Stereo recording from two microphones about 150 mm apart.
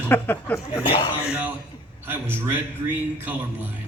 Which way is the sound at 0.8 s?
30° left (ahead or behind).